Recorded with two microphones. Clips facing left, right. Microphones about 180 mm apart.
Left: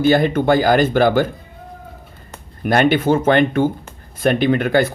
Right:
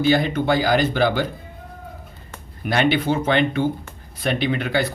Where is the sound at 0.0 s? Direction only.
50° left (ahead or behind).